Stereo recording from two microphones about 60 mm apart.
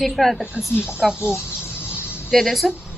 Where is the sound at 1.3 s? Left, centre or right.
Left.